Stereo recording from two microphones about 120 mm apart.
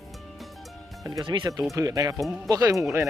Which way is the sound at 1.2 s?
40° right (ahead or behind).